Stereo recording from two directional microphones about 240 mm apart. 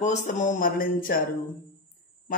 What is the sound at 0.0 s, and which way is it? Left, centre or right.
A man's voice, left.